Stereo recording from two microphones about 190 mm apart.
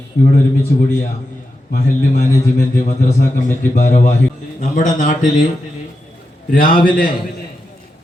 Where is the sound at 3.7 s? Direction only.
40° left (ahead or behind).